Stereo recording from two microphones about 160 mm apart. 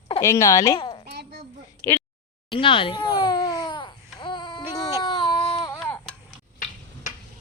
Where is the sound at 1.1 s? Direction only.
90° right.